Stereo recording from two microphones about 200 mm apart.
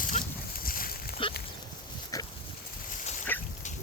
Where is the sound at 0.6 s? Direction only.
45° left (ahead or behind).